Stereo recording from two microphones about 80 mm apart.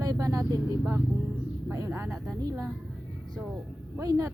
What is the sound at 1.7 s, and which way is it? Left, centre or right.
A woman's voice, right.